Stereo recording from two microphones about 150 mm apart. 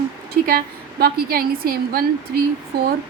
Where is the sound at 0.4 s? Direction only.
90° right.